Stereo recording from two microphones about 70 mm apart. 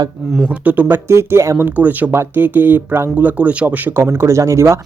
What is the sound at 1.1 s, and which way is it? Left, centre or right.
Speech, right.